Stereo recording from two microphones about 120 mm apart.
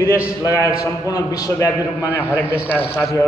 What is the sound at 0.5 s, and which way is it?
A man's voice, 25° left (ahead or behind).